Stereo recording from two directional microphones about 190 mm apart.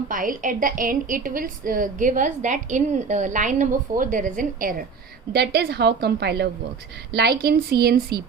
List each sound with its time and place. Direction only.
0.1 s a woman's voice: 45° right (ahead or behind)
5.3 s a woman's voice: 60° right (ahead or behind)